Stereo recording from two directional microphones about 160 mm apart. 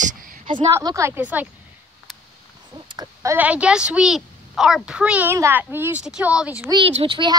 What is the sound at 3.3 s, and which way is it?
A woman's voice, 10° right (ahead or behind).